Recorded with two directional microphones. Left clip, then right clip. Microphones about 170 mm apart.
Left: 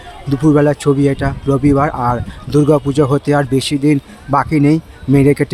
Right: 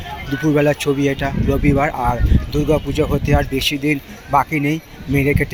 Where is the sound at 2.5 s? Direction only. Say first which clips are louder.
Left 6 dB; 40° left (ahead or behind).